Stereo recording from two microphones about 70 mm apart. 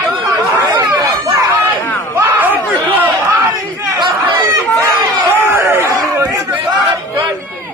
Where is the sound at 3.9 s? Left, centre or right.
Right.